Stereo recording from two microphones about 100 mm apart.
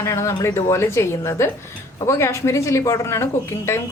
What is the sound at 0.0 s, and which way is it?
Speech, 30° left (ahead or behind).